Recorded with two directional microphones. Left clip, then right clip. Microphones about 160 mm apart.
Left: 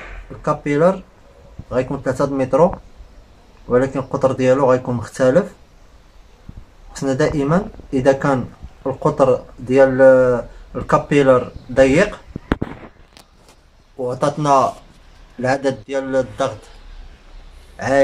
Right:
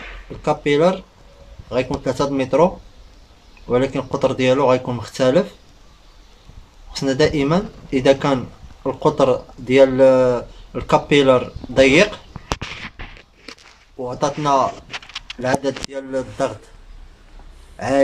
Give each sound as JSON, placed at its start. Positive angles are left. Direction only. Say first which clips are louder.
{"t": 0.4, "sound": "a man's voice", "louder": "even", "side_deg": -20}
{"t": 3.7, "sound": "speech", "louder": "left 2 dB", "side_deg": -5}
{"t": 4.6, "sound": "a man's voice", "louder": "left 1 dB", "side_deg": -15}
{"t": 5.0, "sound": "speech", "louder": "left 3 dB", "side_deg": 5}
{"t": 6.9, "sound": "speech", "louder": "right 1 dB", "side_deg": 5}
{"t": 13.9, "sound": "speech", "louder": "left 2 dB", "side_deg": 5}
{"t": 17.7, "sound": "speech", "louder": "left 2 dB", "side_deg": -5}